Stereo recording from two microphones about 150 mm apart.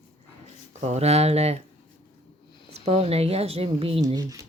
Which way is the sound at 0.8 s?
45° right (ahead or behind).